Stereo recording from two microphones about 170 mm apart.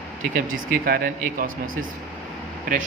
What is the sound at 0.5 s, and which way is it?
Speech, 60° right (ahead or behind).